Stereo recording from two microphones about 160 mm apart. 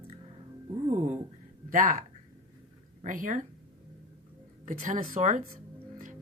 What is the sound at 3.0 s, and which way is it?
Speech, 55° right (ahead or behind).